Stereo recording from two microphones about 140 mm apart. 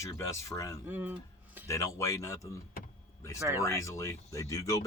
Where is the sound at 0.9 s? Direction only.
10° right (ahead or behind).